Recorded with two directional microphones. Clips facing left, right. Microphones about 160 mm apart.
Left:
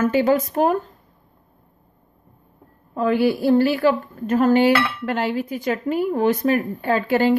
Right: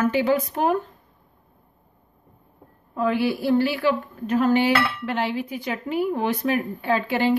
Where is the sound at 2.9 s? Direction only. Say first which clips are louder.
Left 4 dB; 45° left (ahead or behind).